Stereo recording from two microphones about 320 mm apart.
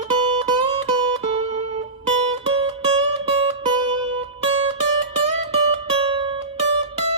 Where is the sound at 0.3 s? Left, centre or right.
Centre.